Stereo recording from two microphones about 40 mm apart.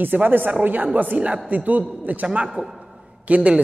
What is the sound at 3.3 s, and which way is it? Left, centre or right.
Speech, right.